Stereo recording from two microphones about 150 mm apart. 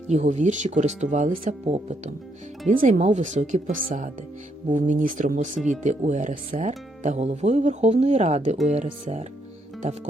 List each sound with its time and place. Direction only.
0.1 s speech: 50° right (ahead or behind)